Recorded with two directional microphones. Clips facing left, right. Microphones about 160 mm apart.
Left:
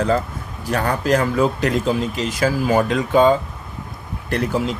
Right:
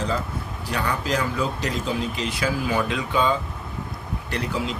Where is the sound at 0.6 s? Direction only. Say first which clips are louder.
Left 6 dB; 45° left (ahead or behind).